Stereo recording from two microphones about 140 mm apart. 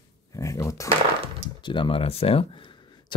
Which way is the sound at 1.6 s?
35° left (ahead or behind).